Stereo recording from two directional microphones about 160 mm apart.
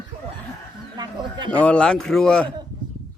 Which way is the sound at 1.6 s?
5° left (ahead or behind).